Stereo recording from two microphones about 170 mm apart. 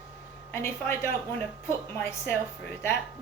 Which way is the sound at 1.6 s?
15° left (ahead or behind).